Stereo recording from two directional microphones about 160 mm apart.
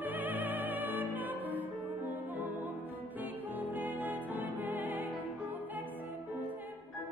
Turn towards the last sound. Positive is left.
turn(degrees=-10)  # may be behind; listen again after turning